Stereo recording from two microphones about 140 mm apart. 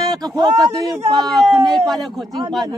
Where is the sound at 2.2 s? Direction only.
25° right (ahead or behind).